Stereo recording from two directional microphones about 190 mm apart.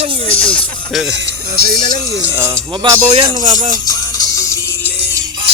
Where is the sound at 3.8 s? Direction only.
20° left (ahead or behind).